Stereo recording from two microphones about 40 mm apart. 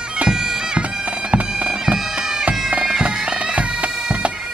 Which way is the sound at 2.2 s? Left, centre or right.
Centre.